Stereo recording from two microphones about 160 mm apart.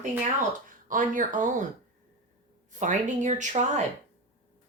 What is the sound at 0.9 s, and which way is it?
Speech, 55° right (ahead or behind).